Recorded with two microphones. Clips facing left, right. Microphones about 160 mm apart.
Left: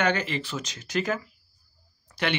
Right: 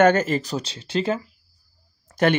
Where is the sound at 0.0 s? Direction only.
45° right (ahead or behind); by 1.2 s 30° right (ahead or behind).